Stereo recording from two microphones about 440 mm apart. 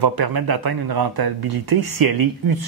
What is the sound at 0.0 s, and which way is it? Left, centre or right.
Speech, right.